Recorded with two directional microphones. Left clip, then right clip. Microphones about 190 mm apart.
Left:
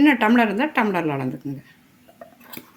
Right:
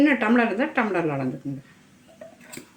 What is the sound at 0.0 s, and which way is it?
A woman's voice, 60° left (ahead or behind).